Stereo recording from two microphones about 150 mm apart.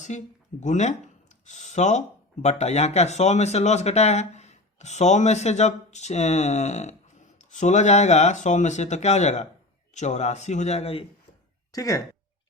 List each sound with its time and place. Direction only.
0.1 s speech: 50° left (ahead or behind)
11.7 s speech: 25° left (ahead or behind)